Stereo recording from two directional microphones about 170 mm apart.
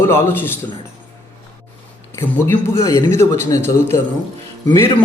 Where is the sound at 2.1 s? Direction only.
15° left (ahead or behind).